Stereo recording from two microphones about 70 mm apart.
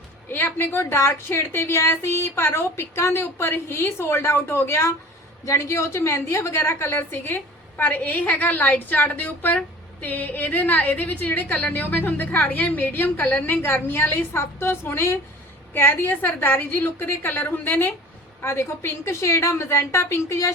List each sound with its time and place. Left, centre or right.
0.3 s a woman's voice: left